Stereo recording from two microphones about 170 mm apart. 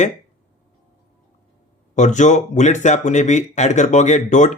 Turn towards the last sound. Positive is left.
turn(degrees=45)  # may be behind; listen again after turning